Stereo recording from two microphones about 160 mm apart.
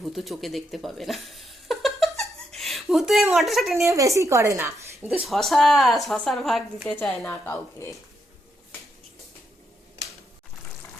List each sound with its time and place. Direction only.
0.0 s a sound: centre (ahead or behind)
3.3 s a woman's voice: centre (ahead or behind)
3.8 s speech: 20° right (ahead or behind)
5.2 s a woman's voice: centre (ahead or behind)
7.3 s a woman's voice: 15° left (ahead or behind)